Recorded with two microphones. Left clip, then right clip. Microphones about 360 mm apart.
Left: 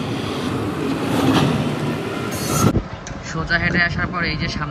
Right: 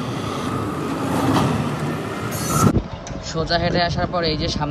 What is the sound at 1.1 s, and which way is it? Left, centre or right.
Vehicle, left.